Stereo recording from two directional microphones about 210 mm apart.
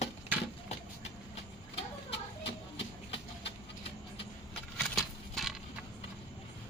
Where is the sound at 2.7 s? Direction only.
25° left (ahead or behind).